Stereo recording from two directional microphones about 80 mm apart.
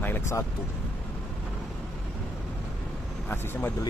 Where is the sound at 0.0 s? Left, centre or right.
Left.